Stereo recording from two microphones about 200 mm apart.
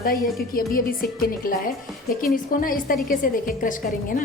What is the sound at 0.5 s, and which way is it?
A woman's voice, 45° left (ahead or behind).